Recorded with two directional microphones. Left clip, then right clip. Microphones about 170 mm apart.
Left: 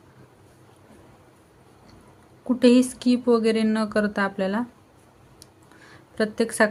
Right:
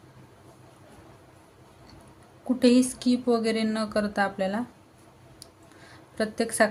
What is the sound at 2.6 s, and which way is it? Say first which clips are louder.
Speech: left 4 dB; 30° left (ahead or behind).